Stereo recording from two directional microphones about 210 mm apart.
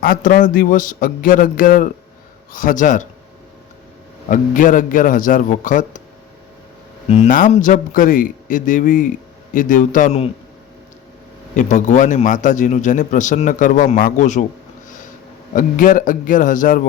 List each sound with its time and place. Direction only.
0.0 s a man's voice: 40° left (ahead or behind)
4.3 s a man's voice: 40° left (ahead or behind)
7.1 s a man's voice: 35° left (ahead or behind)
11.5 s a man's voice: 35° left (ahead or behind)
14.8 s a sound: 40° left (ahead or behind)
15.5 s a man's voice: 40° left (ahead or behind)